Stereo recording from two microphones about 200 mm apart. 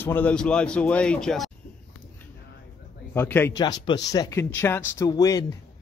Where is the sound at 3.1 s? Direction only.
10° left (ahead or behind).